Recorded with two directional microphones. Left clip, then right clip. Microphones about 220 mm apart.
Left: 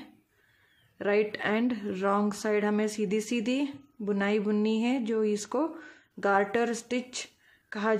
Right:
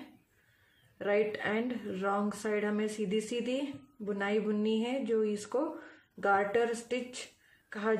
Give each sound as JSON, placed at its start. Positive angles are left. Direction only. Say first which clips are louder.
{"t": 0.9, "sound": "a woman's voice", "louder": "left 3 dB", "side_deg": 45}